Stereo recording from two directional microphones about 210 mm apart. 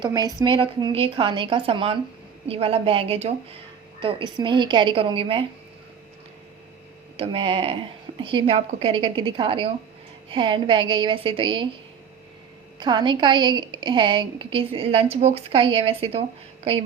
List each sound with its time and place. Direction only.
0.0 s a woman's voice: 20° right (ahead or behind)
7.2 s a woman's voice: 25° right (ahead or behind)
12.8 s a woman's voice: 20° right (ahead or behind)